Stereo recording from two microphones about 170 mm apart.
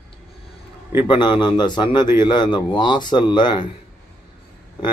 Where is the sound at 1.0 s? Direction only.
30° left (ahead or behind).